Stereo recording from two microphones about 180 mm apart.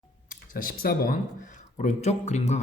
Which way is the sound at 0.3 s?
50° left (ahead or behind).